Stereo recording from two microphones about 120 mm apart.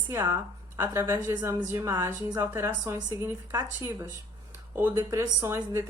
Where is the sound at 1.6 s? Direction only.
25° right (ahead or behind).